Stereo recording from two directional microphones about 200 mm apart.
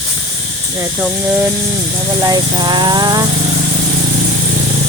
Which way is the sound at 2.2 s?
20° right (ahead or behind).